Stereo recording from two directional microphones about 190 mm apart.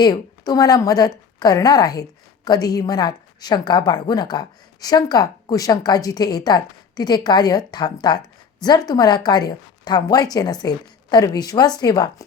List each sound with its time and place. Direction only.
0.0 s a woman's voice: 20° left (ahead or behind)